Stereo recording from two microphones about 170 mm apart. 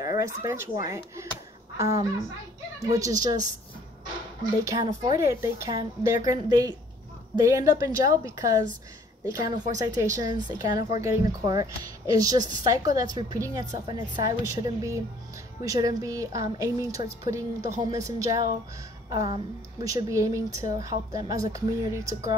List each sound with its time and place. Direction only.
0.0 s a woman's voice: 20° right (ahead or behind)
2.8 s a woman's voice: 20° right (ahead or behind)
4.4 s a woman's voice: 20° right (ahead or behind)